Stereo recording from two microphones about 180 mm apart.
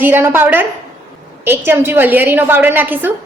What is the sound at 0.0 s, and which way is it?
A woman's voice, 10° right (ahead or behind).